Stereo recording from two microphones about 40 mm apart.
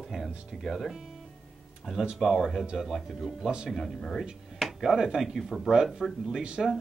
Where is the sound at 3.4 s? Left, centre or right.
Centre.